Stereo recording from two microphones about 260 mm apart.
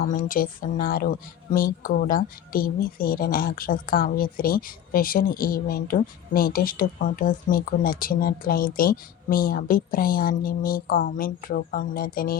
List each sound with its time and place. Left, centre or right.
0.0 s speech: left